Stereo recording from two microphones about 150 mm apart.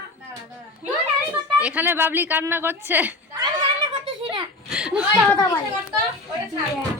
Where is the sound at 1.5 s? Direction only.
10° right (ahead or behind).